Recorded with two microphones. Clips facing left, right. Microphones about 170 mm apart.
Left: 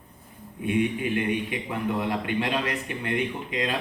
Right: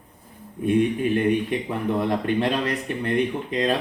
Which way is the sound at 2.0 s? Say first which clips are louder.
Right 5 dB; 40° right (ahead or behind).